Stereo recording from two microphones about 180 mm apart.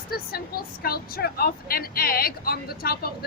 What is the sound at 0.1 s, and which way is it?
A woman's voice, 55° left (ahead or behind).